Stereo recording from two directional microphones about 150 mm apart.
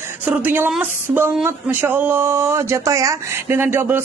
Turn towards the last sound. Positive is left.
turn(degrees=-15)  # may be behind; listen again after turning